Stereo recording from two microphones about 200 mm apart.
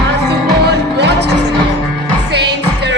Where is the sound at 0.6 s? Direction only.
55° right (ahead or behind).